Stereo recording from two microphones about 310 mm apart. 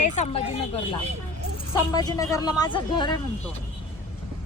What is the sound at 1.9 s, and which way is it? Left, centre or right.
Speech, centre.